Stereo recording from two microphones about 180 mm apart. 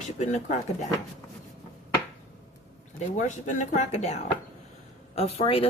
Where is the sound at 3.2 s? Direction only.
40° left (ahead or behind).